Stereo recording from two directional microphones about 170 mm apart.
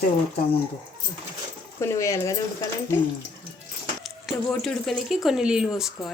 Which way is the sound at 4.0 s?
Centre (ahead or behind).